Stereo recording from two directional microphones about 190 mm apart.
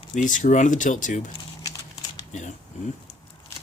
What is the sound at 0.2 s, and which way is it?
Speech, 40° left (ahead or behind).